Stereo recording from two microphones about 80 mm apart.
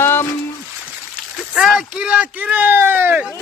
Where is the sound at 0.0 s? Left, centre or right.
Left.